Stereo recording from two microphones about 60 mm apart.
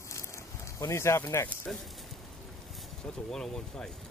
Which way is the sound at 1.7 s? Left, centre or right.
Centre.